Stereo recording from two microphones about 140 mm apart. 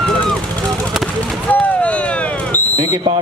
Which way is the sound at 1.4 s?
10° left (ahead or behind).